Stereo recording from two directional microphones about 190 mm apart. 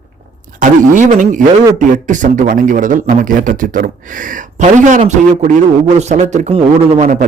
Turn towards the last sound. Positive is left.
turn(degrees=-35)  # may be behind; listen again after turning